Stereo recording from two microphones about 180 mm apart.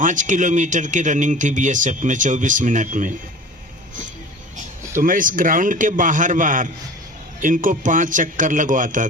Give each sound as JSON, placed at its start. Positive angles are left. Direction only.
{"t": 0.0, "sound": "speech", "side_deg": -45}
{"t": 4.9, "sound": "speech", "side_deg": -50}